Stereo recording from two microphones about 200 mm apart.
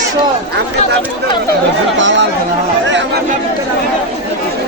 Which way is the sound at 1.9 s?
65° right (ahead or behind).